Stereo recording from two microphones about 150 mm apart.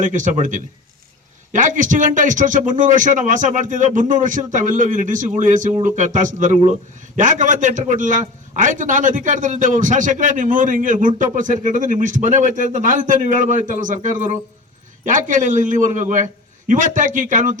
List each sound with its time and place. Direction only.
0.0 s a man's voice: 60° right (ahead or behind)